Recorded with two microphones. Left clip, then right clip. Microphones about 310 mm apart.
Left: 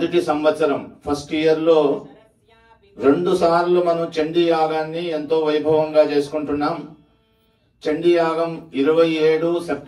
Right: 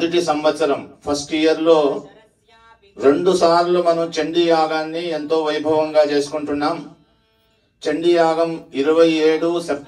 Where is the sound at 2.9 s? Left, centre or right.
Right.